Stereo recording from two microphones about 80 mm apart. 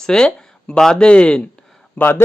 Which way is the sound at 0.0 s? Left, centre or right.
Centre.